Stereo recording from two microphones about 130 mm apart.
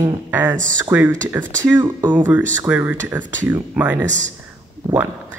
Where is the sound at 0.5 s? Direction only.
85° right.